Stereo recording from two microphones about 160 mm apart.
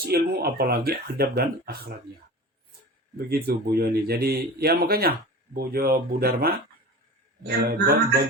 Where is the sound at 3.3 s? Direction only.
75° right (ahead or behind).